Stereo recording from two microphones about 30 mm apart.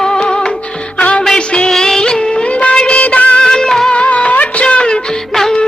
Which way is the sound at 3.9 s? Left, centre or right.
Left.